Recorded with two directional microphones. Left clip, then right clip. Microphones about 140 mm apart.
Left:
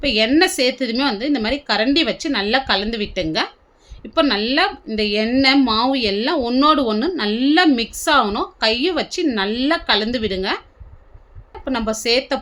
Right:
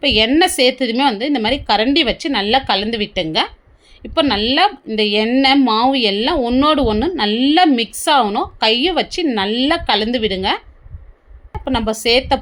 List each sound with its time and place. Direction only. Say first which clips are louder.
0.0 s a woman's voice: right 3 dB; 20° right (ahead or behind)
11.6 s a woman's voice: right 3 dB; 15° right (ahead or behind)